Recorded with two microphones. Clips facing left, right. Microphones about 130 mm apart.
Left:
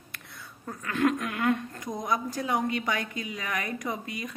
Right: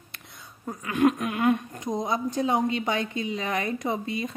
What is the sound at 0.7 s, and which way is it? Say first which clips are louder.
A woman's voice: right 4 dB; 15° right (ahead or behind).